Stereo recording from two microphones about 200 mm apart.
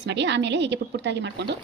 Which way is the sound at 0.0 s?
60° right (ahead or behind).